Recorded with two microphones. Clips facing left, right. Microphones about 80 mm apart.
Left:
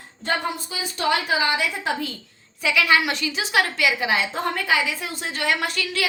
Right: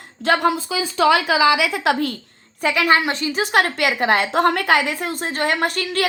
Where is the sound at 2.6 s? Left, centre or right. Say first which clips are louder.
Right 3 dB; right.